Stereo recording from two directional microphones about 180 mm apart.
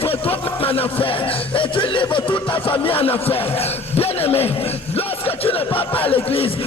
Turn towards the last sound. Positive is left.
turn(degrees=30)  # may be behind; listen again after turning